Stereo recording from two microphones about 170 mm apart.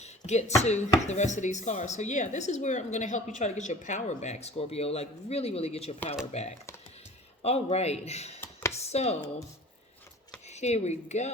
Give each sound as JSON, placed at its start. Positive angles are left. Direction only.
{"t": 0.0, "sound": "a man's voice", "side_deg": 40}
{"t": 10.5, "sound": "a man's voice", "side_deg": 40}